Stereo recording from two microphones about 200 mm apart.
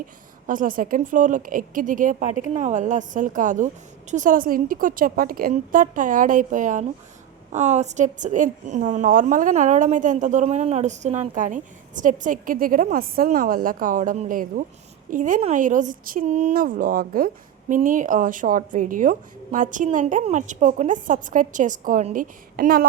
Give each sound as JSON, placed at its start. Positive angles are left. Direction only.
{"t": 0.0, "sound": "a woman's voice", "side_deg": -40}